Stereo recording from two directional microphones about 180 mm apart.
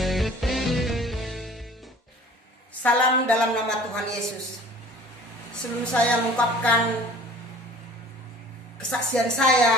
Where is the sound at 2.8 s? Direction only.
5° left (ahead or behind).